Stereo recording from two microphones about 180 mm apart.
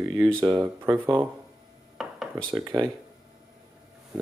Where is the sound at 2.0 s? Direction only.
Centre (ahead or behind).